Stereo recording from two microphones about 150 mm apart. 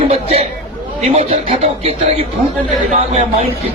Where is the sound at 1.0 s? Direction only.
45° right (ahead or behind).